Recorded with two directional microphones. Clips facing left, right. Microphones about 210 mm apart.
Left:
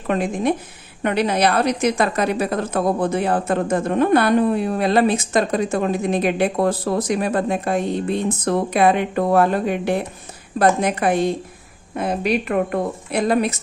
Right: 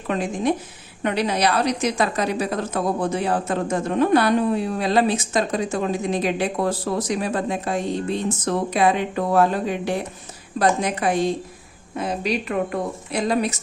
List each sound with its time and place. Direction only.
0.1 s a woman's voice: 55° left (ahead or behind)